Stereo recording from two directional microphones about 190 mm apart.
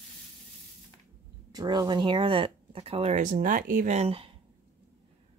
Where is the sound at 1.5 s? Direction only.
20° right (ahead or behind).